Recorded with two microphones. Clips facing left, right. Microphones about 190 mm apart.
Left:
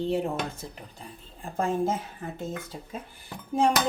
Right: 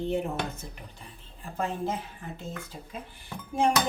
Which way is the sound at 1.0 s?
45° left (ahead or behind).